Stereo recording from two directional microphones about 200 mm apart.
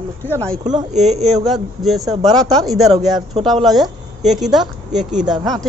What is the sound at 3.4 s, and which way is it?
A woman's voice, centre (ahead or behind).